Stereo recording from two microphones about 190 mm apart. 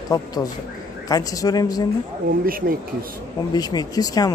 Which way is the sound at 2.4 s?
50° right (ahead or behind).